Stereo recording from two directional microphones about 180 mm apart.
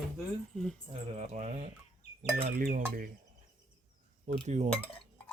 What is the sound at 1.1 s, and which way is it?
Speech, 35° right (ahead or behind).